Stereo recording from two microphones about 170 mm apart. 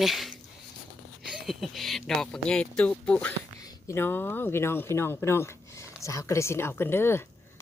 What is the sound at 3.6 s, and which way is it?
Speech, 20° left (ahead or behind).